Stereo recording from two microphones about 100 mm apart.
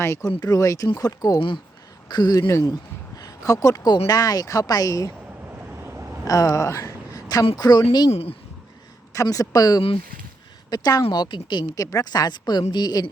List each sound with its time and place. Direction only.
0.0 s speech: 25° left (ahead or behind)
0.3 s speech: 35° left (ahead or behind)
1.4 s a woman's voice: 55° left (ahead or behind)
3.2 s a sound: 35° left (ahead or behind)
4.0 s speech: 40° left (ahead or behind)
5.8 s a sound: 25° right (ahead or behind)
6.2 s a sound: 35° left (ahead or behind)
7.5 s a woman's voice: 40° left (ahead or behind)
8.1 s speech: 75° left (ahead or behind)
9.2 s a woman's voice: 35° left (ahead or behind)
11.7 s speech: 35° left (ahead or behind)